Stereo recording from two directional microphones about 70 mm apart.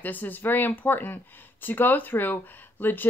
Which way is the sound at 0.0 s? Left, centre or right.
Left.